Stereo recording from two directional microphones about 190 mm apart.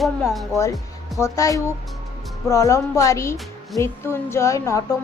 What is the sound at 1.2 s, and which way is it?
Speech, 15° left (ahead or behind).